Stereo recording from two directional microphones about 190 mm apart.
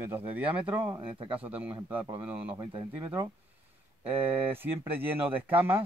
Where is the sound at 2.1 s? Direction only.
10° right (ahead or behind).